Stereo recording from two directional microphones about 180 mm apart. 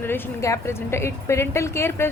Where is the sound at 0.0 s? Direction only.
15° left (ahead or behind).